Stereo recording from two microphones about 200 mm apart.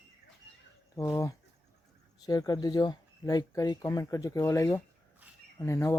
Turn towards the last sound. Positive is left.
turn(degrees=15)  # may be behind; listen again after turning